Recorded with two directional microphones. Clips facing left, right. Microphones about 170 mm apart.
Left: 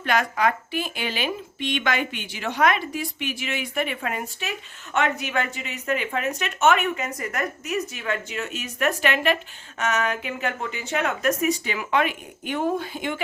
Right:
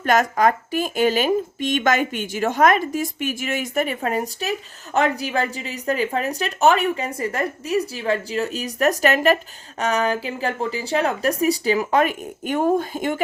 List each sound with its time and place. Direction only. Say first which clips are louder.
0.0 s speech: right 5 dB; 45° right (ahead or behind)